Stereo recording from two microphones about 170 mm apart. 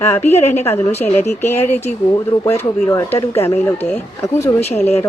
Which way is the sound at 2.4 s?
15° left (ahead or behind).